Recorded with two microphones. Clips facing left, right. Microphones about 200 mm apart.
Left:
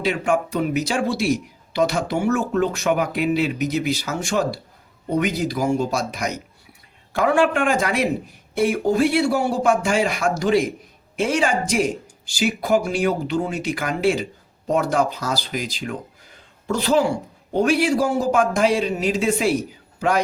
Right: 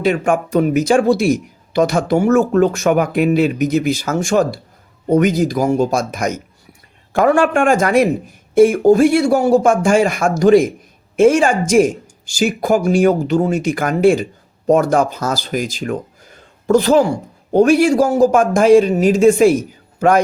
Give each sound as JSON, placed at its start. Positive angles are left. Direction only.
{"t": 0.0, "sound": "a man's voice", "side_deg": -50}